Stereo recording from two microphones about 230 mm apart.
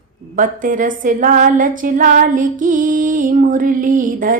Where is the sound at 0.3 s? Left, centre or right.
Right.